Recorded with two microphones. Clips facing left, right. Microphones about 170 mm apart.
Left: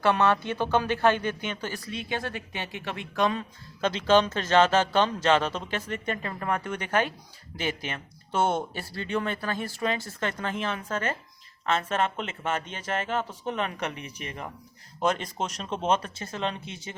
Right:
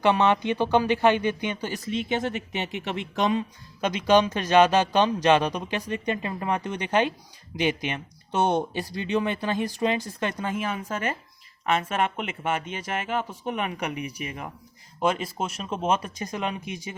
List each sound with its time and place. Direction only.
0.0 s speech: 15° right (ahead or behind)